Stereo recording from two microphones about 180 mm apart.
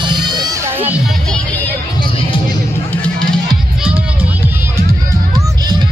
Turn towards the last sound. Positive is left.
turn(degrees=-5)  # may be behind; listen again after turning